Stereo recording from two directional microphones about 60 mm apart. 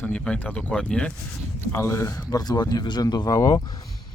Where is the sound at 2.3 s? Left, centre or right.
Left.